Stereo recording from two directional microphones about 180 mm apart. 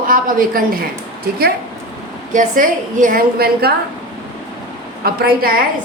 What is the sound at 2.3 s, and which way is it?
A woman's voice, 45° right (ahead or behind).